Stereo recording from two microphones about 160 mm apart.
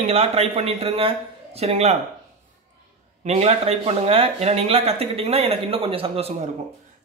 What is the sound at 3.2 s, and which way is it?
Speech, 40° right (ahead or behind).